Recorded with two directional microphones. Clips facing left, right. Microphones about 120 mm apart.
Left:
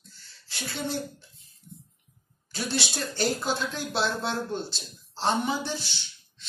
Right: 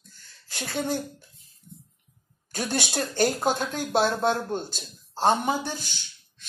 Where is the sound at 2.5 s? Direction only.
50° right (ahead or behind).